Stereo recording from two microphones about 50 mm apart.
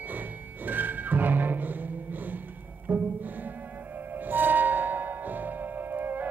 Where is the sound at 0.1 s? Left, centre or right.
Right.